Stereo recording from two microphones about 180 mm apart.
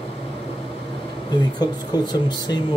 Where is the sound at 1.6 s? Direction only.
25° left (ahead or behind).